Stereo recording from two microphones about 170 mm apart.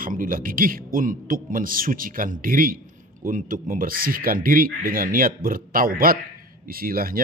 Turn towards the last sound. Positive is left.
turn(degrees=-55)  # may be behind; listen again after turning